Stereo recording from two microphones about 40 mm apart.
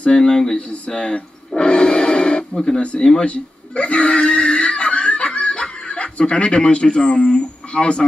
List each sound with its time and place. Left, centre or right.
0.1 s speech: centre
0.6 s speech: left
2.5 s speech: centre
3.3 s a sound: left
7.2 s speech: left